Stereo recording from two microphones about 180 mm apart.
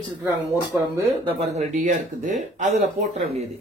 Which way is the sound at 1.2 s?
35° right (ahead or behind).